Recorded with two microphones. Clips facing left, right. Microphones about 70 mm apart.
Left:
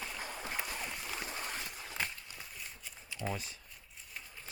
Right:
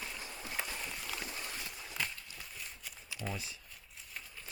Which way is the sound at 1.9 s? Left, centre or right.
Left.